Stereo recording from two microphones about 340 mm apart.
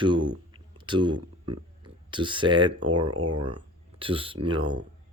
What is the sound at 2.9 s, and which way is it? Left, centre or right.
Speech, right.